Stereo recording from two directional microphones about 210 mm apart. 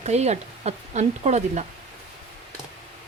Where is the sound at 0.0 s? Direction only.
30° right (ahead or behind).